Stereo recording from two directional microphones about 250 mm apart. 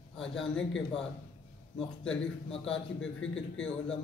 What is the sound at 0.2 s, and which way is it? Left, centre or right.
Speech, centre.